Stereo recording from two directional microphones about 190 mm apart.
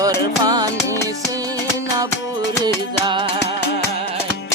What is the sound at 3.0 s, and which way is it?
Music, 25° right (ahead or behind).